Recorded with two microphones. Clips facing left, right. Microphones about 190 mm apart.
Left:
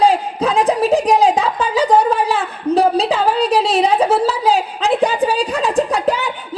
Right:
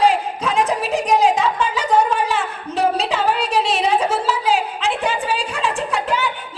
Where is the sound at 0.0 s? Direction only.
35° left (ahead or behind).